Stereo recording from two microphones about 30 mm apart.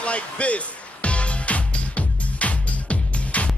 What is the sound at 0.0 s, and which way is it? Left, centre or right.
Speech, left.